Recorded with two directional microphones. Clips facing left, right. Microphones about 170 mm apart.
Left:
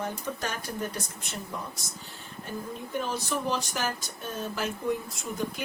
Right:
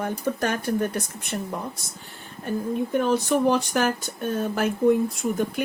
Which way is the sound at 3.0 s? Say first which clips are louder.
Right 9 dB; 60° right (ahead or behind).